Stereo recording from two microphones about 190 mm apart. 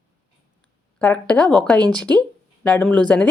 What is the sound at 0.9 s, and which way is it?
A woman's voice, 5° left (ahead or behind).